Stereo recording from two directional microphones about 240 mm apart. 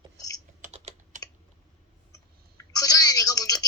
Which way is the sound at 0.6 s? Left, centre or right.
Right.